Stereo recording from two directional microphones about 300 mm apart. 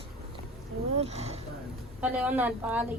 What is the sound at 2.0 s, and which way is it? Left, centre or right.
Speech, centre.